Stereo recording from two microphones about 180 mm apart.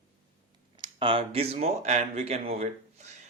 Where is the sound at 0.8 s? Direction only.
30° right (ahead or behind).